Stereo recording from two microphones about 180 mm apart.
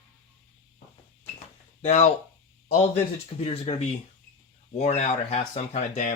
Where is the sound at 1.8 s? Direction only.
40° left (ahead or behind).